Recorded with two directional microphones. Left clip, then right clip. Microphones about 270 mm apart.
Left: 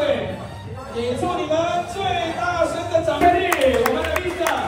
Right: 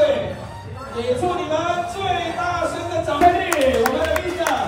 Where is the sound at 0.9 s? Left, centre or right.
Centre.